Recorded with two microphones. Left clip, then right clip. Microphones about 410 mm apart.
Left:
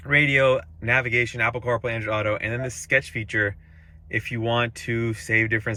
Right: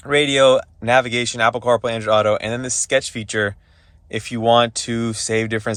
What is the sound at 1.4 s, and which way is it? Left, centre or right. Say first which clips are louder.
Speech: right 7 dB; right.